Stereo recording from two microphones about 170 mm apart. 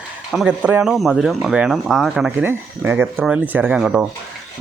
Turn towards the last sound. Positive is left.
turn(degrees=-5)  # may be behind; listen again after turning